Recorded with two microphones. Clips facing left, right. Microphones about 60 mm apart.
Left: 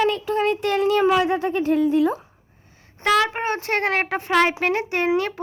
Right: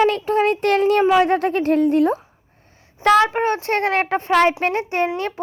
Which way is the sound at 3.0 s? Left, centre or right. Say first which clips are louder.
Right 5 dB; left.